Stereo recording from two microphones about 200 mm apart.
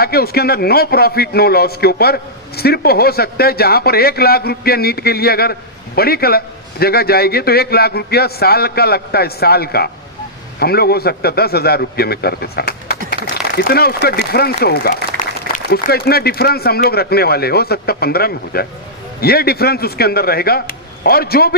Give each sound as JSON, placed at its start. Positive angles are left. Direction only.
{"t": 0.0, "sound": "a man's voice", "side_deg": 50}